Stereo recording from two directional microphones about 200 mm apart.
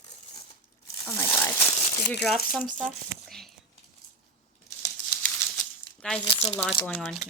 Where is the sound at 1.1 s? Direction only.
10° left (ahead or behind).